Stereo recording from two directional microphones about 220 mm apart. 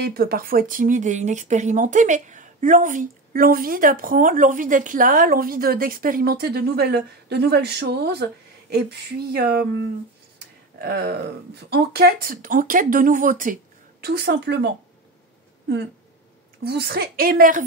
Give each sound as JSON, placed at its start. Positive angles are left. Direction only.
{"t": 0.0, "sound": "speech", "side_deg": -45}
{"t": 10.8, "sound": "a woman's voice", "side_deg": -45}
{"t": 14.0, "sound": "a woman's voice", "side_deg": -45}
{"t": 16.6, "sound": "a woman's voice", "side_deg": -45}